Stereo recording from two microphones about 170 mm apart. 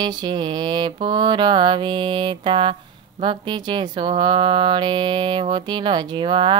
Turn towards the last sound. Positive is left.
turn(degrees=-30)  # may be behind; listen again after turning